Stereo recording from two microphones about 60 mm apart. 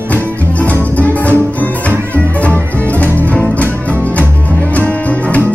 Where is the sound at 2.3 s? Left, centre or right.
Left.